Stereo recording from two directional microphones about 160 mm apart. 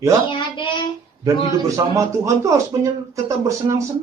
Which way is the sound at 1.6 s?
20° right (ahead or behind).